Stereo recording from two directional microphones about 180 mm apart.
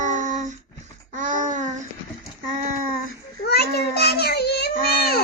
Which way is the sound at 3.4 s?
65° left (ahead or behind).